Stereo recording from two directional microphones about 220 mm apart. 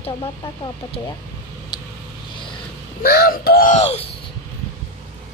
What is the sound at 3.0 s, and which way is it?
Speech, 45° left (ahead or behind).